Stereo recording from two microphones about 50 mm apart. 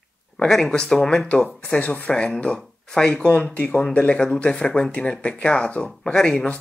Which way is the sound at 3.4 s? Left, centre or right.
Left.